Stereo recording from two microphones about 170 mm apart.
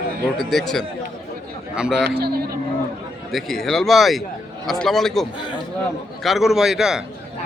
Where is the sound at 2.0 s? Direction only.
70° right (ahead or behind).